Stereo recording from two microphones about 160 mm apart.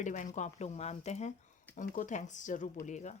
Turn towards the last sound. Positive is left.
turn(degrees=50)  # may be behind; listen again after turning